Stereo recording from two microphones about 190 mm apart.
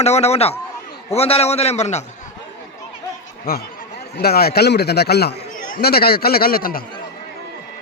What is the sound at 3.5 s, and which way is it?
A man's voice, 50° left (ahead or behind).